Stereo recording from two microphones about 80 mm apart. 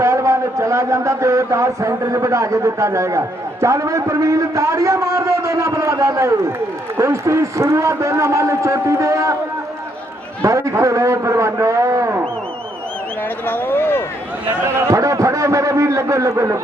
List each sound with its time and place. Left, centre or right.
0.0 s a man's voice: right
10.4 s a man's voice: right
13.5 s a sound: left
14.8 s a man's voice: right